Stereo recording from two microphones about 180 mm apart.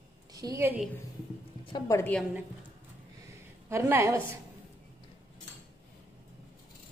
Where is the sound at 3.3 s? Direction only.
15° right (ahead or behind).